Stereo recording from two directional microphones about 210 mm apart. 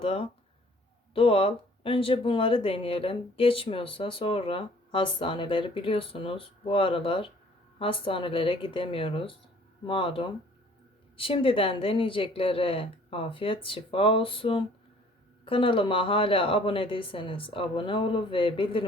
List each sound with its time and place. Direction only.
0.0 s speech: 25° left (ahead or behind)